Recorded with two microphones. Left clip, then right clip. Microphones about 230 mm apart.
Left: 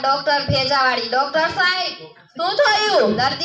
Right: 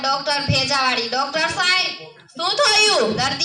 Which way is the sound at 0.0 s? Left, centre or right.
Right.